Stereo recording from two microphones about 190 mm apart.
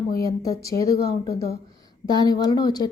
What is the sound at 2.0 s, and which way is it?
Speech, 20° left (ahead or behind).